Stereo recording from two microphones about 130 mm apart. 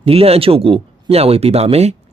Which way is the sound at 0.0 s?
50° right (ahead or behind).